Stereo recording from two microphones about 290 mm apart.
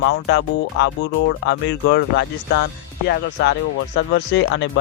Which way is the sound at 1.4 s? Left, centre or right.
Left.